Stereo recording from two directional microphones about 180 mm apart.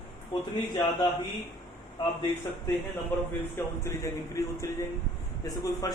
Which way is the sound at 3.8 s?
15° left (ahead or behind).